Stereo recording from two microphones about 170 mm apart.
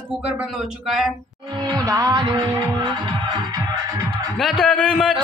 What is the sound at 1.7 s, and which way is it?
Music, 20° right (ahead or behind).